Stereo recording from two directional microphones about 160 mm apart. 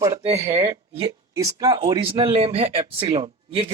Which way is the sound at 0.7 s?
30° right (ahead or behind).